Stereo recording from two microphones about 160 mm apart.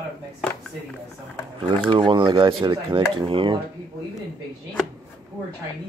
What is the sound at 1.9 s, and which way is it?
Speech, 30° right (ahead or behind).